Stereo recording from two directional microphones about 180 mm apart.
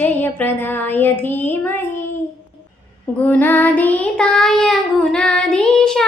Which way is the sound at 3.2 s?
10° left (ahead or behind).